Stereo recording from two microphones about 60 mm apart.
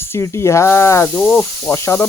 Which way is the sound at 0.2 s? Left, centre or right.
Left.